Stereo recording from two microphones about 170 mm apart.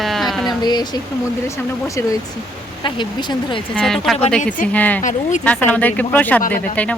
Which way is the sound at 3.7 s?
Centre (ahead or behind).